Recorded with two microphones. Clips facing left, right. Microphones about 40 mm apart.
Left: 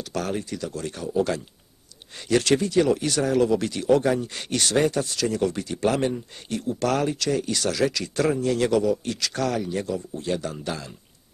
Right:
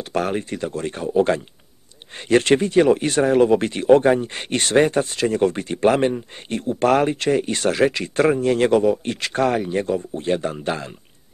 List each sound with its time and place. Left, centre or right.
0.0 s speech: right